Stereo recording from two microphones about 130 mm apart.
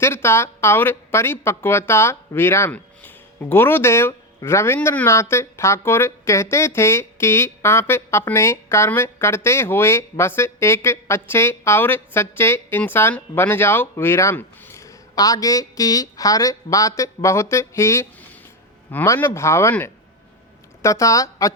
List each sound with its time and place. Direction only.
0.0 s speech: 20° left (ahead or behind)